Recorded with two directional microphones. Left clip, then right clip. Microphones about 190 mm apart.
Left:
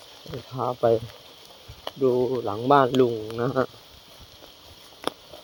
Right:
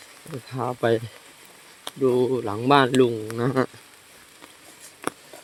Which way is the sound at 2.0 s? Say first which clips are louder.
Right 1 dB; 20° right (ahead or behind).